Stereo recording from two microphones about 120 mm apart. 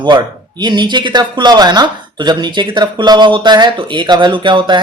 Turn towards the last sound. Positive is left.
turn(degrees=-40)  # may be behind; listen again after turning